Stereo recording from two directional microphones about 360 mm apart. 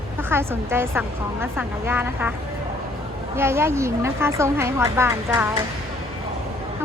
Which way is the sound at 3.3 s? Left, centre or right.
Centre.